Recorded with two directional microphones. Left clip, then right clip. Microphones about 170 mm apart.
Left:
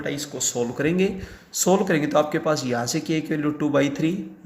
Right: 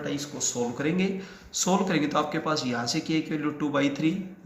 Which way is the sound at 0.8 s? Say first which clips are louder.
Left 6 dB; 50° left (ahead or behind).